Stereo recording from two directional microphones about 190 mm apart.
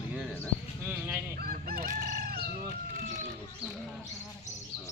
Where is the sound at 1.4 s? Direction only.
55° right (ahead or behind).